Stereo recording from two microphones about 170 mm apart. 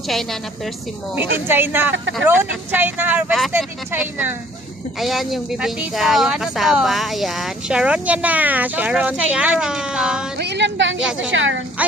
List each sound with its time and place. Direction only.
0.1 s speech: centre (ahead or behind)
1.1 s speech: 10° right (ahead or behind)
10.3 s speech: 90° right